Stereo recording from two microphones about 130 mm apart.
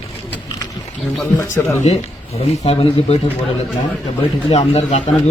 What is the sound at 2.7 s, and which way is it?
Speech, 40° left (ahead or behind).